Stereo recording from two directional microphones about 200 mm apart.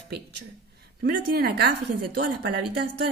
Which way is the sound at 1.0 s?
50° right (ahead or behind).